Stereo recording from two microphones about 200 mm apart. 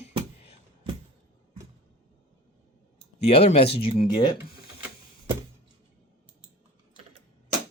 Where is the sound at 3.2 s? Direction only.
30° left (ahead or behind).